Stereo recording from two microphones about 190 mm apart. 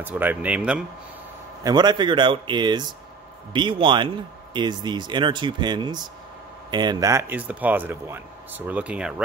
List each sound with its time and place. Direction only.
0.0 s speech: 10° right (ahead or behind)
1.6 s speech: 20° right (ahead or behind)